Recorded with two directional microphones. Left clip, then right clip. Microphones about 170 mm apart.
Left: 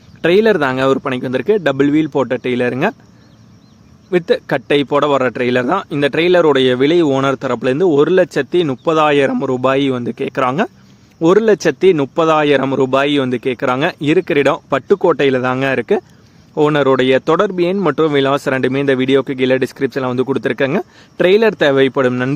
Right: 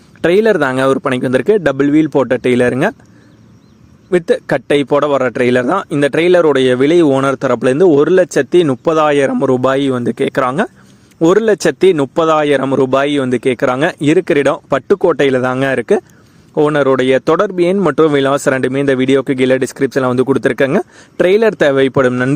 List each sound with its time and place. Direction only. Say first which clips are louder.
0.2 s speech: right 1 dB; 30° right (ahead or behind)
4.1 s speech: right 2 dB; 25° right (ahead or behind)